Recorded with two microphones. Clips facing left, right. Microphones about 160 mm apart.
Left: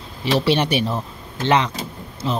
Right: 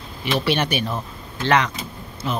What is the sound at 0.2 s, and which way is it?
A woman's voice, 30° left (ahead or behind).